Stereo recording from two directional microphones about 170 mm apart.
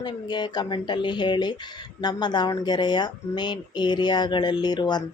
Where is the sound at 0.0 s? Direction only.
25° left (ahead or behind).